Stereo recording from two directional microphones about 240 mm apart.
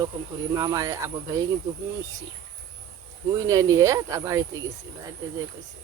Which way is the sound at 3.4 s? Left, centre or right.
Centre.